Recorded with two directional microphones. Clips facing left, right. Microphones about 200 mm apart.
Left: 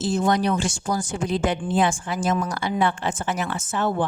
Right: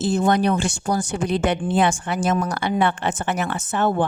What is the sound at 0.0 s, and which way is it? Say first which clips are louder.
A woman's voice: right 2 dB; 60° right (ahead or behind).